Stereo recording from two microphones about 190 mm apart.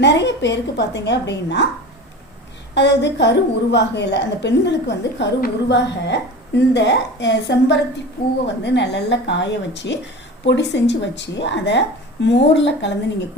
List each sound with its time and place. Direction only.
0.0 s a woman's voice: 65° left (ahead or behind)
2.7 s a woman's voice: 65° left (ahead or behind)